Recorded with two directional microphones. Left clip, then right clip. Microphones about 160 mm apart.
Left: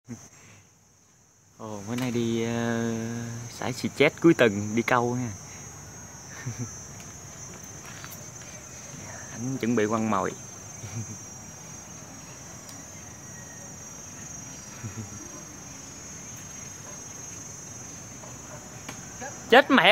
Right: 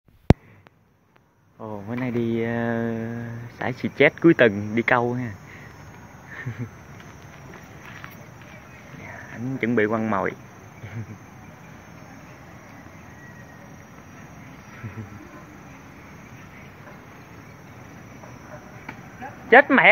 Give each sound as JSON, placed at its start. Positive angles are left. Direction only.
{"t": 1.6, "sound": "speech", "side_deg": 15}
{"t": 9.0, "sound": "speech", "side_deg": 10}
{"t": 19.5, "sound": "speech", "side_deg": 15}